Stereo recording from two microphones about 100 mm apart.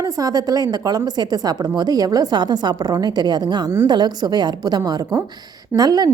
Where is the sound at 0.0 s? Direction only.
35° right (ahead or behind).